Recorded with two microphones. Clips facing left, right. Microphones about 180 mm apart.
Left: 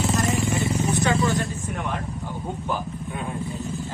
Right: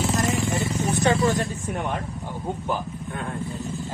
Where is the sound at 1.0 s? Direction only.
40° right (ahead or behind).